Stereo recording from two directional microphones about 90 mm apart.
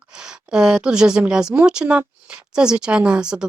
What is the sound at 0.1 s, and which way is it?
A woman's voice, 10° right (ahead or behind).